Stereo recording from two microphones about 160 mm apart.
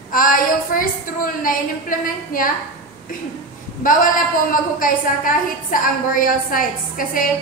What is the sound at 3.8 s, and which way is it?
A woman's voice, 60° left (ahead or behind).